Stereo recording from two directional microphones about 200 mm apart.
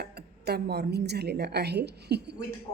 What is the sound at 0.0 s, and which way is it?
A woman's voice, 55° right (ahead or behind).